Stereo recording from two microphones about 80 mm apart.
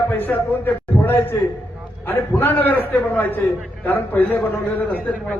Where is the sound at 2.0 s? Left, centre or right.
Left.